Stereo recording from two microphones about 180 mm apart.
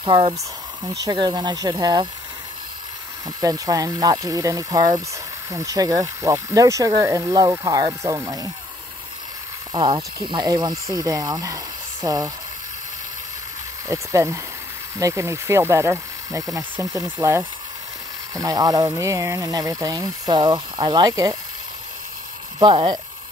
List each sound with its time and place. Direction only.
0.0 s speech: 25° right (ahead or behind)
3.3 s speech: 20° right (ahead or behind)
9.7 s speech: 25° right (ahead or behind)
13.8 s speech: 15° right (ahead or behind)
22.6 s speech: 25° right (ahead or behind)